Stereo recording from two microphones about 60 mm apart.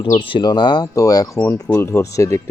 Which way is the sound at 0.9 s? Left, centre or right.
Left.